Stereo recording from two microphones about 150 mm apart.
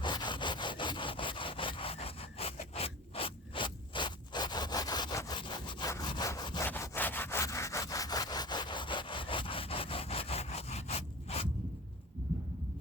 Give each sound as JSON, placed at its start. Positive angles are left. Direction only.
{"t": 0.0, "sound": "sawing", "side_deg": 30}
{"t": 6.7, "sound": "sawing", "side_deg": 15}